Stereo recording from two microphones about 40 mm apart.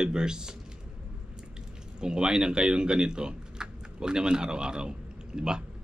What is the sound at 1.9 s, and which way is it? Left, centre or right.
Speech, right.